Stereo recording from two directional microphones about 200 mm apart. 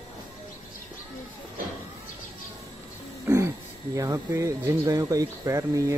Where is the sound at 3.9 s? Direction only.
15° right (ahead or behind).